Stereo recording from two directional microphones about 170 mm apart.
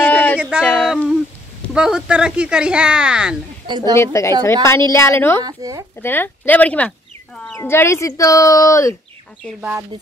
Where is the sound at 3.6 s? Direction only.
25° right (ahead or behind).